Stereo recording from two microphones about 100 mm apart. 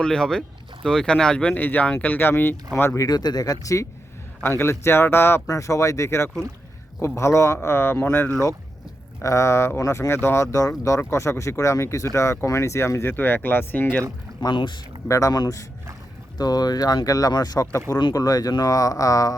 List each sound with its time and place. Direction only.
0.0 s speech: 5° left (ahead or behind); by 3.1 s 25° left (ahead or behind)
3.1 s speech: 45° left (ahead or behind); by 14.0 s 20° left (ahead or behind)
14.4 s speech: 55° left (ahead or behind)
15.0 s speech: 30° left (ahead or behind)